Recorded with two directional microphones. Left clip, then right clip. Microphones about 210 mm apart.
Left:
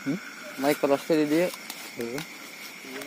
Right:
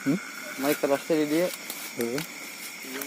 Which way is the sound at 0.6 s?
45° left (ahead or behind).